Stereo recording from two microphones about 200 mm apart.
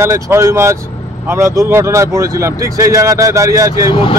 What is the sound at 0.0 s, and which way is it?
Speech, 15° right (ahead or behind).